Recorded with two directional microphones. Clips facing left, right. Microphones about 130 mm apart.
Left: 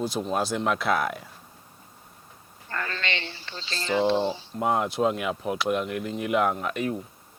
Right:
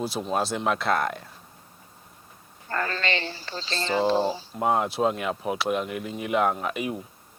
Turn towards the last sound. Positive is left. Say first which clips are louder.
# left 1 dB
turn(degrees=-5)  # may be behind; listen again after turning